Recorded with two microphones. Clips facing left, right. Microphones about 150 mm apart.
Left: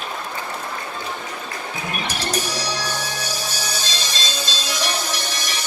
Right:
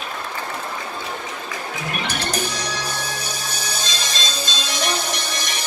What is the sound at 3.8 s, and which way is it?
Music, 30° left (ahead or behind).